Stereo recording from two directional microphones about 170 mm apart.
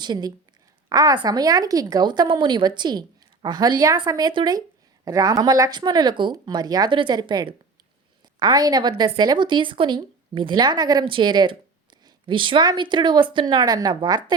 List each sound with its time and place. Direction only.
0.0 s a woman's voice: 25° right (ahead or behind)